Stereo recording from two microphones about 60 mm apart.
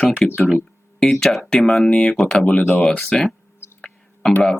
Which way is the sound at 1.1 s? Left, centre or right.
Centre.